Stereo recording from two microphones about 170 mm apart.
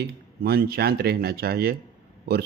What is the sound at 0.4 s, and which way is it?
A man's voice, 65° right (ahead or behind).